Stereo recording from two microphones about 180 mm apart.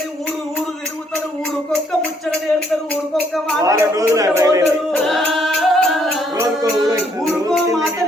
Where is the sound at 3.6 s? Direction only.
20° right (ahead or behind).